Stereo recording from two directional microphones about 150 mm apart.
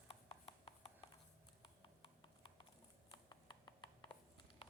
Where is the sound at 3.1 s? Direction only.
30° left (ahead or behind).